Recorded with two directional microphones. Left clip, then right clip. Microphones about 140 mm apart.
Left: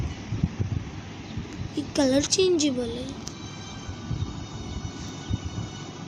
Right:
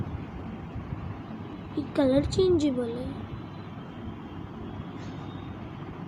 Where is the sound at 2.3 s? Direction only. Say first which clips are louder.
Left 2 dB; 65° left (ahead or behind).